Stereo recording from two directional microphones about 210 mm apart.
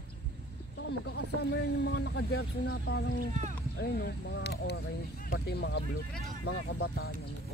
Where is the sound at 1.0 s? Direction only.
55° left (ahead or behind).